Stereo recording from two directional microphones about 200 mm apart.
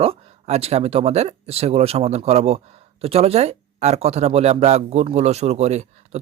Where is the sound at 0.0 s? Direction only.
30° right (ahead or behind).